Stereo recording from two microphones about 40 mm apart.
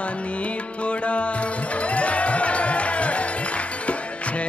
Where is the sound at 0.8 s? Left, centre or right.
Left.